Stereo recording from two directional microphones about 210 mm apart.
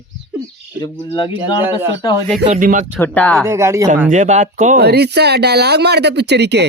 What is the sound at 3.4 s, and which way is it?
Speech, 15° right (ahead or behind).